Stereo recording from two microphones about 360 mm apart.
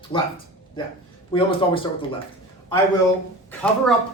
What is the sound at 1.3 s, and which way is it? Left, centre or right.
Speech, centre.